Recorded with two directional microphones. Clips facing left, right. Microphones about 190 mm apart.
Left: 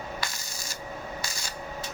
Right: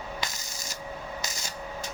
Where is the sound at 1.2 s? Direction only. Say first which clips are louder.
Even; 20° right (ahead or behind).